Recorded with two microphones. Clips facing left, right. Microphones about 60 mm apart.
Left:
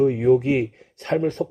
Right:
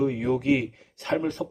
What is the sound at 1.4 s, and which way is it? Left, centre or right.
Speech, left.